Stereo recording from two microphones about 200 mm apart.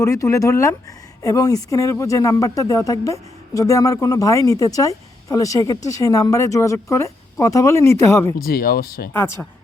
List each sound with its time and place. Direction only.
0.0 s speech: 15° left (ahead or behind)
8.4 s speech: 50° left (ahead or behind)
9.1 s speech: 10° left (ahead or behind)